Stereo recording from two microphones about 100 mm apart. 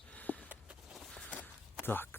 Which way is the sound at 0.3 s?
15° left (ahead or behind).